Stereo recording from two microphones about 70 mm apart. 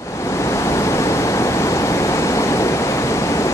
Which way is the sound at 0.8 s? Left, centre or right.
Left.